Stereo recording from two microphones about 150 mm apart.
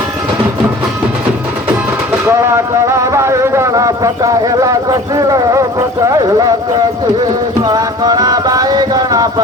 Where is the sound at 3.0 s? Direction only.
20° right (ahead or behind).